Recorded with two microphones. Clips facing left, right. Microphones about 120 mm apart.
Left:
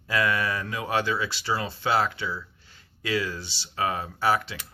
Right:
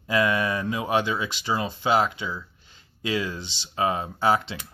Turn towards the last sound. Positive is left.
turn(degrees=-25)  # may be behind; listen again after turning